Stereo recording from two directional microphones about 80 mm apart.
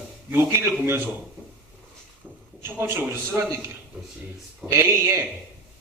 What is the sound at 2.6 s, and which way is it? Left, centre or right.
Speech, right.